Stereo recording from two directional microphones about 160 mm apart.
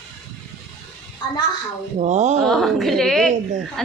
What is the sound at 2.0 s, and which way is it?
Speech, 45° right (ahead or behind).